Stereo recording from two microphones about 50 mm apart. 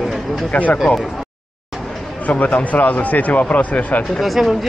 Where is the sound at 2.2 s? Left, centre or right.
Left.